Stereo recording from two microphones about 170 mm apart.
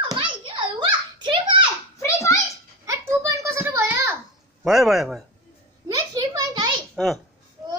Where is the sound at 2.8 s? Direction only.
15° right (ahead or behind).